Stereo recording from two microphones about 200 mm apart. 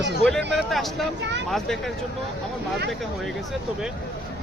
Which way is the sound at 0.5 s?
Centre (ahead or behind).